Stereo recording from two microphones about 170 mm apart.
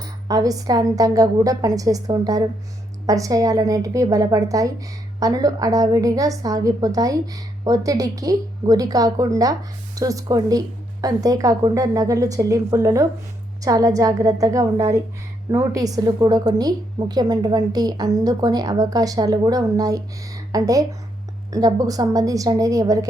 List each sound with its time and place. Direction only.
0.0 s a woman's voice: 20° right (ahead or behind)